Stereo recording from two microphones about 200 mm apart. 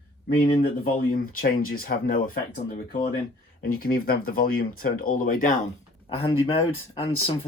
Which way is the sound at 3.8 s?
45° left (ahead or behind).